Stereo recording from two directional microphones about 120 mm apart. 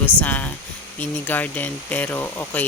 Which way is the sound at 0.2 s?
15° left (ahead or behind).